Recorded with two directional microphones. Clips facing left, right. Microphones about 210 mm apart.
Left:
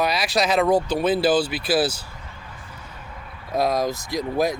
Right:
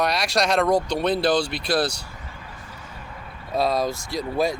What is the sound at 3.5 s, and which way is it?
Speech, 15° left (ahead or behind).